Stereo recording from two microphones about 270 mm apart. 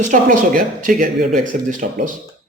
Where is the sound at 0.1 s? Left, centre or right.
Right.